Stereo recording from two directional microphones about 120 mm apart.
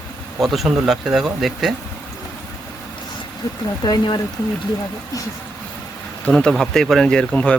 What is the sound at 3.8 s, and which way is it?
Speech, 35° left (ahead or behind).